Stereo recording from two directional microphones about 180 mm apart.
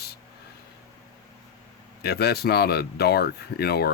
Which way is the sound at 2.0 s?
60° left (ahead or behind).